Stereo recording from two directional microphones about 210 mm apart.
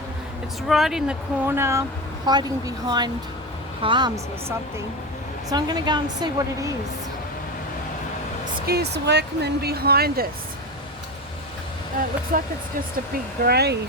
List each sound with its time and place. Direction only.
0.7 s a woman's voice: centre (ahead or behind); by 6.7 s 20° right (ahead or behind)
8.6 s speech: 50° right (ahead or behind)
12.3 s speech: 40° right (ahead or behind)